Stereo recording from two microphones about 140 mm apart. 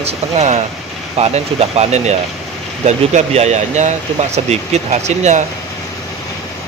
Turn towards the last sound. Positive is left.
turn(degrees=-55)  # may be behind; listen again after turning